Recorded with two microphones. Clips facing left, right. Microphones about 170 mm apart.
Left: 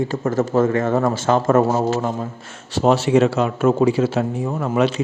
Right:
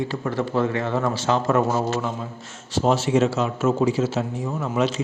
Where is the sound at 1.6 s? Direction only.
35° left (ahead or behind).